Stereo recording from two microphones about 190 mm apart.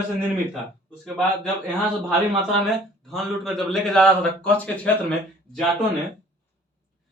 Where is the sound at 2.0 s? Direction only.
Centre (ahead or behind).